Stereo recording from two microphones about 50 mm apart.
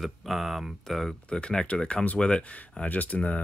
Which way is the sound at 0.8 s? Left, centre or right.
Centre.